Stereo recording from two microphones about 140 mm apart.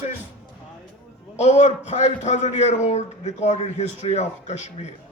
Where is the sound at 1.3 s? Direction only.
55° left (ahead or behind).